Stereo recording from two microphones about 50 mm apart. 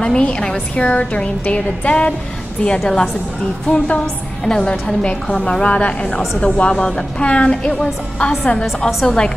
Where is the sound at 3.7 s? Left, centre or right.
Left.